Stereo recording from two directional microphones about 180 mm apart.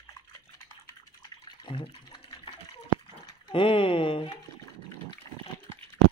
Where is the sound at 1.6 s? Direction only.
30° left (ahead or behind).